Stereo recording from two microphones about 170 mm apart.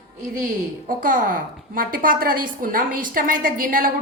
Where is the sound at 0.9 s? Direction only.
50° right (ahead or behind).